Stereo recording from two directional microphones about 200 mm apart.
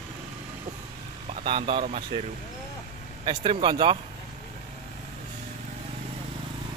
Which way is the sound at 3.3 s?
25° right (ahead or behind).